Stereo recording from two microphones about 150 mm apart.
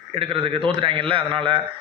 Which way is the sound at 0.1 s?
35° right (ahead or behind).